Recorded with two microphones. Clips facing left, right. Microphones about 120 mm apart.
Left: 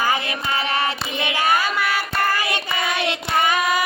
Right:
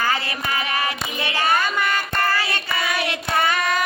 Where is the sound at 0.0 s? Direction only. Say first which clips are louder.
Left 1 dB; 15° left (ahead or behind).